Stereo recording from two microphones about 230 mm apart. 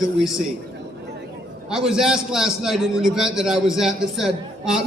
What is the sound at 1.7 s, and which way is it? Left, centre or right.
A man's voice, centre.